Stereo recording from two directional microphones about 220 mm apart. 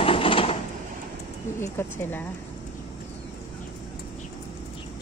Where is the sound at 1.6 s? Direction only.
10° left (ahead or behind).